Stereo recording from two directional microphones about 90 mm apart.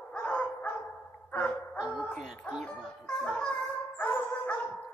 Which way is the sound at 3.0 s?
10° left (ahead or behind).